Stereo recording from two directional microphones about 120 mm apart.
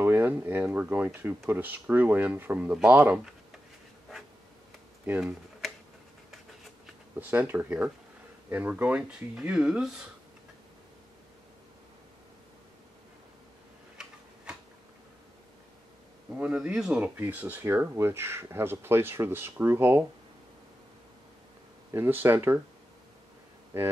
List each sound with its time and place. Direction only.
0.0 s speech: 15° right (ahead or behind)
7.2 s speech: 15° right (ahead or behind)
16.3 s speech: 10° right (ahead or behind)
21.9 s speech: 20° right (ahead or behind)
23.7 s speech: 20° right (ahead or behind)